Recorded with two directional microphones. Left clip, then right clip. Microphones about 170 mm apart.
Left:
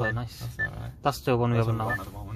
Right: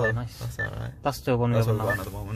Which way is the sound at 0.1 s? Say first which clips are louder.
Right 2 dB; 20° left (ahead or behind).